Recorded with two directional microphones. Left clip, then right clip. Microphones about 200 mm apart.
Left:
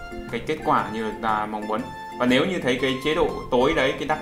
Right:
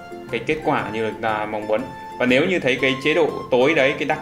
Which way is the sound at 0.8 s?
Centre (ahead or behind).